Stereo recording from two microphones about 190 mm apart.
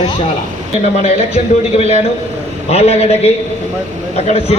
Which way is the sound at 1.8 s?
35° left (ahead or behind).